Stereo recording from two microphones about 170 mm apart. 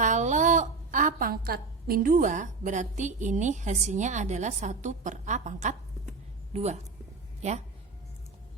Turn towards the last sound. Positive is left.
turn(degrees=-40)  # may be behind; listen again after turning